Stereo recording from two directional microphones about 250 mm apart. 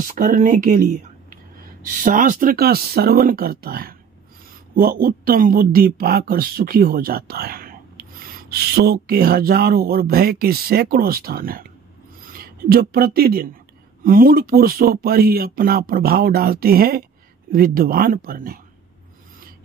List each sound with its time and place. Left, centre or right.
0.1 s speech: right
2.0 s speech: right